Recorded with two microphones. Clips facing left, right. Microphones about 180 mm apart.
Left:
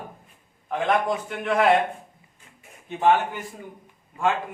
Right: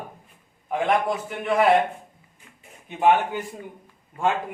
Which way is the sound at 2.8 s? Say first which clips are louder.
Right 1 dB; 15° right (ahead or behind).